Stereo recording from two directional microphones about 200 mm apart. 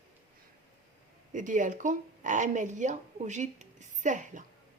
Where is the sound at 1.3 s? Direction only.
40° right (ahead or behind).